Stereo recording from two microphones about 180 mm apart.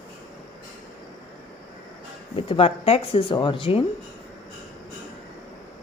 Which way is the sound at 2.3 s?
30° left (ahead or behind).